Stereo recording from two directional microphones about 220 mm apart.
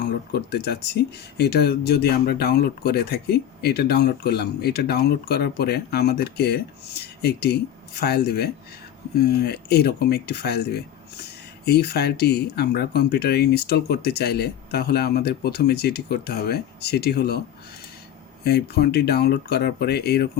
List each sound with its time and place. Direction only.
0.3 s speech: 45° left (ahead or behind)
18.4 s speech: 45° left (ahead or behind)